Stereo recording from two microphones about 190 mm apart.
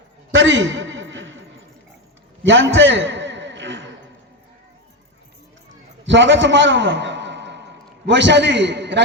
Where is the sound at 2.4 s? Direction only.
75° right (ahead or behind).